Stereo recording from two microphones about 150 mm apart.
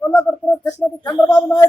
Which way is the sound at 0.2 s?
10° left (ahead or behind).